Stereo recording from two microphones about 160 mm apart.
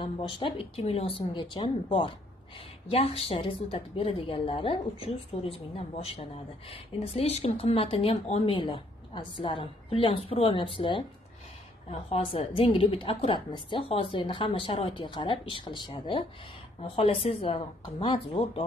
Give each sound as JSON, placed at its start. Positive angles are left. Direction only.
{"t": 0.0, "sound": "a woman's voice", "side_deg": 30}
{"t": 8.5, "sound": "a woman's voice", "side_deg": 30}